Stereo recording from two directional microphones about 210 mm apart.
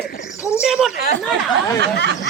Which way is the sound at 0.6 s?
Centre (ahead or behind).